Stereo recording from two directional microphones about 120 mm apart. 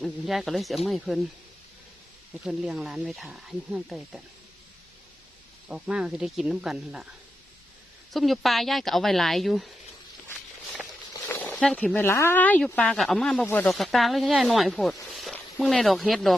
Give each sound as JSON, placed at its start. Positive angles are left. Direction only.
{"t": 0.0, "sound": "speech", "side_deg": 0}
{"t": 2.4, "sound": "speech", "side_deg": -5}
{"t": 5.6, "sound": "speech", "side_deg": -5}
{"t": 8.1, "sound": "speech", "side_deg": 0}
{"t": 11.3, "sound": "a sound", "side_deg": 15}
{"t": 11.5, "sound": "speech", "side_deg": 5}
{"t": 13.4, "sound": "speech", "side_deg": 15}
{"t": 13.7, "sound": "speech", "side_deg": 0}
{"t": 15.1, "sound": "a sound", "side_deg": 0}
{"t": 15.6, "sound": "speech", "side_deg": 0}